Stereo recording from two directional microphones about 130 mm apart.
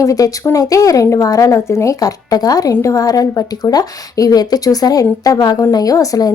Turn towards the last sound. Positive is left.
turn(degrees=30)  # may be behind; listen again after turning